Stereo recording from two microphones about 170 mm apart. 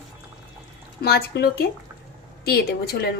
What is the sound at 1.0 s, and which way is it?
A woman's voice, 65° left (ahead or behind).